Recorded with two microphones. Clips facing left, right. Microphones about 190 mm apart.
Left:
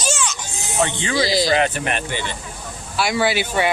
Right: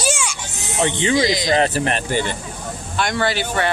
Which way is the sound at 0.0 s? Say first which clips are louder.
Right 1 dB; 10° right (ahead or behind).